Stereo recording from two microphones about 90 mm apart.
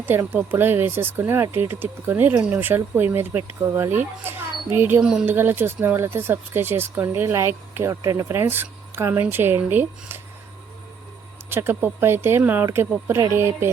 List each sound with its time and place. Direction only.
0.0 s speech: 25° right (ahead or behind)
8.3 s speech: 25° right (ahead or behind)
11.4 s speech: 25° right (ahead or behind)